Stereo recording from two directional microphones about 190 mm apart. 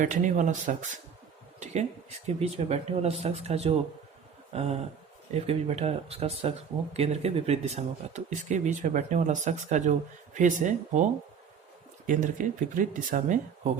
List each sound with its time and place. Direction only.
0.0 s speech: 40° right (ahead or behind)